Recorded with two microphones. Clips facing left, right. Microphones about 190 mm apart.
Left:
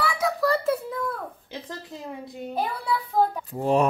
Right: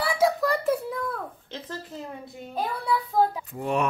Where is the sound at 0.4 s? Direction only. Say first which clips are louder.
Left 1 dB; 15° right (ahead or behind).